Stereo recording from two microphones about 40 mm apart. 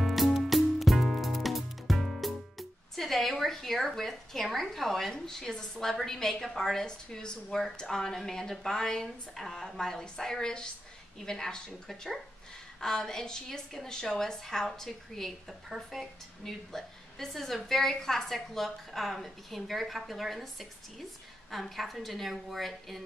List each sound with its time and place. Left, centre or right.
0.0 s music: centre
3.0 s a woman's voice: centre
12.8 s a woman's voice: centre
21.5 s a woman's voice: centre